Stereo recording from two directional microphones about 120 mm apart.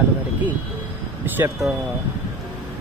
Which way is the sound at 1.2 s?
15° right (ahead or behind).